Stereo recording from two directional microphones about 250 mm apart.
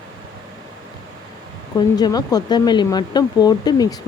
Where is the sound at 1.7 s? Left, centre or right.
Centre.